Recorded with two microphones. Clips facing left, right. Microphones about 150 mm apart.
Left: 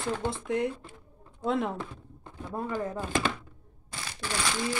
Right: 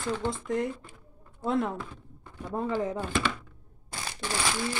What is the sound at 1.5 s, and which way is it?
Speech, centre (ahead or behind).